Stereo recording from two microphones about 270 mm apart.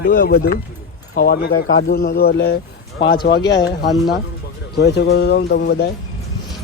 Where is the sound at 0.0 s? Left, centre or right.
Left.